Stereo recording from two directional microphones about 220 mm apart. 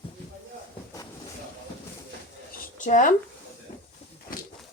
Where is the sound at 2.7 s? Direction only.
35° left (ahead or behind).